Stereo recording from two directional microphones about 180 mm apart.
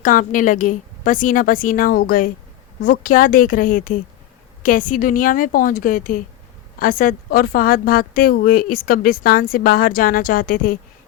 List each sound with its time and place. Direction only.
0.0 s a woman's voice: 45° left (ahead or behind)